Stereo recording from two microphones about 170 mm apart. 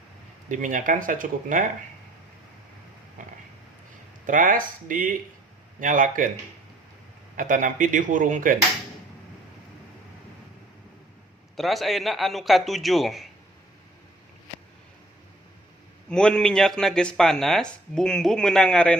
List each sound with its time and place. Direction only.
0.4 s speech: 50° right (ahead or behind)
4.3 s speech: 50° right (ahead or behind)
7.3 s speech: 50° right (ahead or behind)
11.5 s speech: centre (ahead or behind)
16.0 s speech: 5° left (ahead or behind)